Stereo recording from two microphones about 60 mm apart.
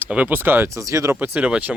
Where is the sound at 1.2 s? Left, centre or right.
Right.